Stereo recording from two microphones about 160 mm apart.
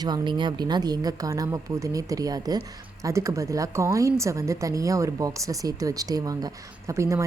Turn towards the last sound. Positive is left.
turn(degrees=-20)  # may be behind; listen again after turning